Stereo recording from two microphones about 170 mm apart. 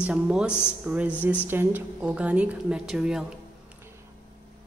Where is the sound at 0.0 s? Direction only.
5° right (ahead or behind).